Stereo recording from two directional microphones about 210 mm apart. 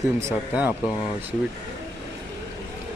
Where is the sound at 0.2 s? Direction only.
10° right (ahead or behind).